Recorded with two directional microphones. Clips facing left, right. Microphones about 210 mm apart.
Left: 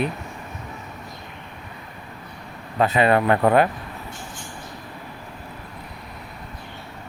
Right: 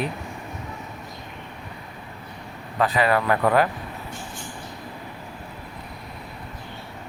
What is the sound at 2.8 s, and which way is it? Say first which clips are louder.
Speech: left 3 dB; 25° left (ahead or behind).